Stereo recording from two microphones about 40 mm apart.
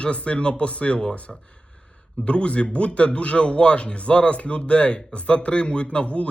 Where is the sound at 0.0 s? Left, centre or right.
Left.